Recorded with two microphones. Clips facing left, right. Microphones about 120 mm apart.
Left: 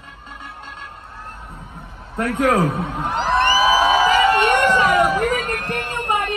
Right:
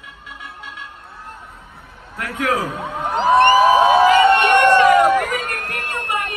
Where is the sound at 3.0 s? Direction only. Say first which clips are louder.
Right 6 dB; centre (ahead or behind).